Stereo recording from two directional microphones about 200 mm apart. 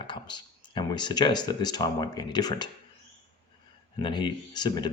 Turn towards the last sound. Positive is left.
turn(degrees=20)  # may be behind; listen again after turning